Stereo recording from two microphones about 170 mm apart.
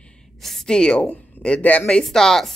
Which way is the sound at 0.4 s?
Centre (ahead or behind).